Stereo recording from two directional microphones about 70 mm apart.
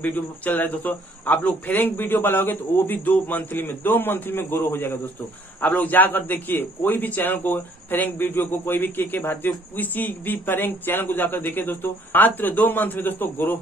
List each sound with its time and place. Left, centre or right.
0.0 s a man's voice: left